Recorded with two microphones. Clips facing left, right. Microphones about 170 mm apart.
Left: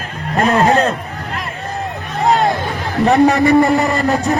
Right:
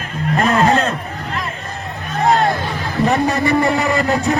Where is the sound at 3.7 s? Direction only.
40° left (ahead or behind).